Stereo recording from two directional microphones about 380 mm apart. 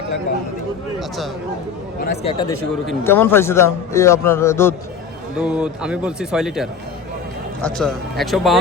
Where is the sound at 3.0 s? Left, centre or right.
Centre.